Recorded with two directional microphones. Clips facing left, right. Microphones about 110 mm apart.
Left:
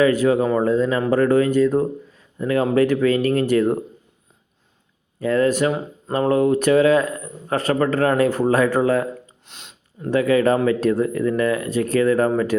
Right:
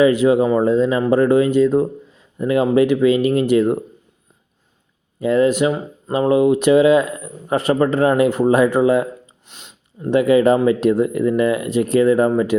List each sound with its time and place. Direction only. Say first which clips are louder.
0.0 s speech: right 3 dB; 20° right (ahead or behind)
5.2 s speech: right 3 dB; 20° right (ahead or behind)
9.5 s a sound: right 1 dB; 10° right (ahead or behind)
10.1 s speech: right 4 dB; 20° right (ahead or behind)